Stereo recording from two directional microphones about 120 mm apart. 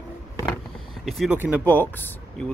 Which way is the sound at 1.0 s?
Centre (ahead or behind).